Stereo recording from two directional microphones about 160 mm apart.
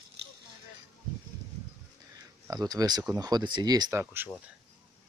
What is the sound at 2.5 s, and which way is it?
Speech, 25° right (ahead or behind).